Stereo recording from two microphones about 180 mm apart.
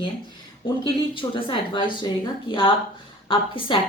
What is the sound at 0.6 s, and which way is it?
Speech, 25° left (ahead or behind).